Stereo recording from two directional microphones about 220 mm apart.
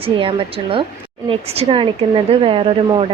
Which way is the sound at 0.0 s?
25° right (ahead or behind).